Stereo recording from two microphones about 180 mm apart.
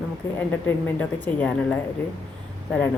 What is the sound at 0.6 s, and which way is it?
Speech, 10° left (ahead or behind).